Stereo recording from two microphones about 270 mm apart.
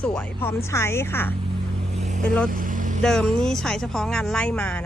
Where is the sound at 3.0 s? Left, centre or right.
Centre.